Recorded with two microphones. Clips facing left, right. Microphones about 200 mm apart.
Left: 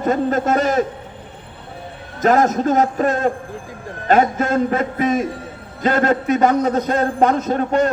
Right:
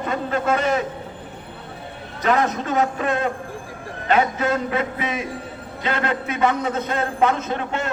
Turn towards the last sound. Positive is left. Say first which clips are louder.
# left 8 dB
turn(degrees=40)  # may be behind; listen again after turning